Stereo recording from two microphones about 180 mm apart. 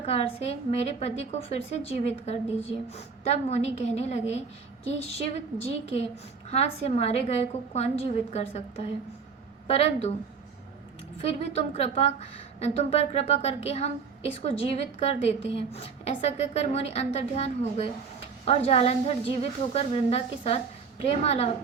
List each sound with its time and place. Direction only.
0.0 s a woman's voice: 35° left (ahead or behind)
11.2 s a woman's voice: 35° left (ahead or behind)